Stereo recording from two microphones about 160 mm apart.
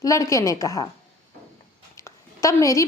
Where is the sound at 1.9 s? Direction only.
20° left (ahead or behind).